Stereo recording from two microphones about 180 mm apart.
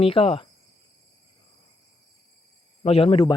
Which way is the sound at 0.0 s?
30° left (ahead or behind).